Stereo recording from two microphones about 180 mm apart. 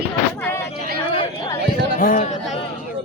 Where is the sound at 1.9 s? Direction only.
50° left (ahead or behind).